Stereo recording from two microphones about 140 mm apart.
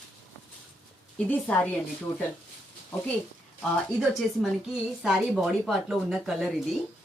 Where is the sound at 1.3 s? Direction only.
10° left (ahead or behind).